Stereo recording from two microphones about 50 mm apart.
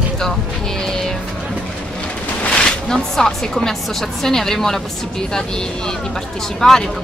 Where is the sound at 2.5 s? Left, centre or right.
Centre.